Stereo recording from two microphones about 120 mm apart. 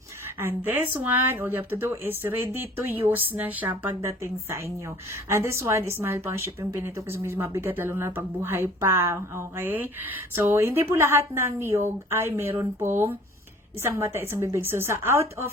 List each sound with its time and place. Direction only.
0.3 s a woman's voice: 15° right (ahead or behind)